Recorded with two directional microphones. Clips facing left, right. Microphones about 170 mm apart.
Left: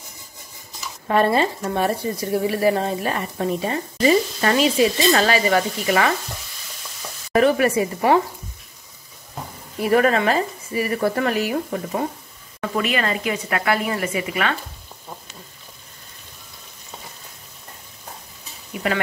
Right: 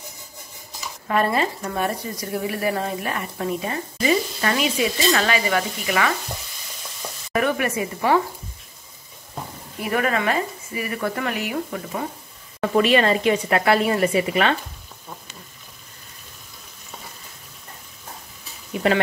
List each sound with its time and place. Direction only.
1.0 s speech: 30° left (ahead or behind)
7.3 s a woman's voice: 30° left (ahead or behind)
9.8 s speech: 35° left (ahead or behind)
12.5 s a woman's voice: 30° right (ahead or behind)